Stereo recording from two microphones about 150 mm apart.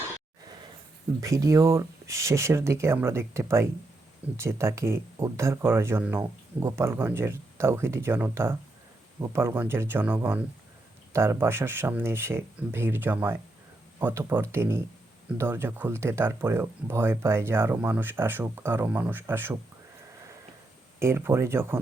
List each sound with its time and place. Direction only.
1.2 s speech: 20° right (ahead or behind)
21.0 s speech: 15° right (ahead or behind)